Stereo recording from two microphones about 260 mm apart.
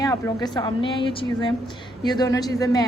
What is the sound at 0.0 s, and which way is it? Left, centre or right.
A woman's voice, centre.